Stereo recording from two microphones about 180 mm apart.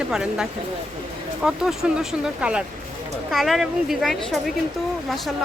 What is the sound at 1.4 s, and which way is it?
Speech, 5° right (ahead or behind).